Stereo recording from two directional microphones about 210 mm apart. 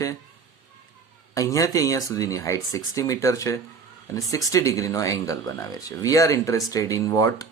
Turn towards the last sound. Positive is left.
turn(degrees=15)  # may be behind; listen again after turning